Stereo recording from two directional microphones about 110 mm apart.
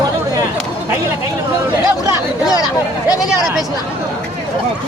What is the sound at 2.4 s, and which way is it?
Speech, 35° left (ahead or behind).